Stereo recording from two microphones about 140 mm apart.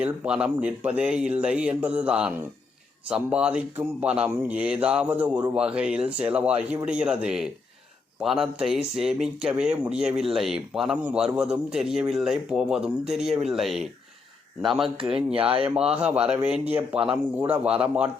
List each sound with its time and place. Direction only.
0.0 s speech: 10° right (ahead or behind)
15.3 s speech: 40° right (ahead or behind)
15.6 s speech: 5° right (ahead or behind)